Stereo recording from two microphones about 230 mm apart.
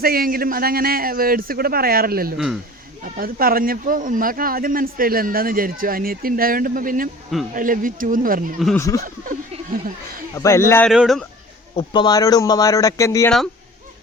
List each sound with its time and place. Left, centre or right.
0.0 s speech: right
8.5 s speech: centre
9.0 s speech: right
10.3 s a man's voice: centre
11.7 s a man's voice: left